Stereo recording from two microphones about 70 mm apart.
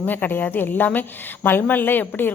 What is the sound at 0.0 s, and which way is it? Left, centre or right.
Speech, left.